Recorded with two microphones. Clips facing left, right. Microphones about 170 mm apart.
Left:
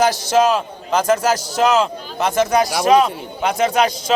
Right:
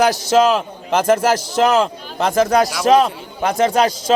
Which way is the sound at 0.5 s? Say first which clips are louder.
Right 1 dB; 55° right (ahead or behind).